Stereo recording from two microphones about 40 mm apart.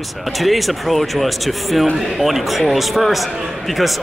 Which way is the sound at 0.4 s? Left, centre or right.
Centre.